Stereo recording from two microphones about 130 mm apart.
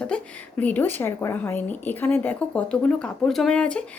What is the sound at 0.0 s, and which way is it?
Speech, 10° left (ahead or behind).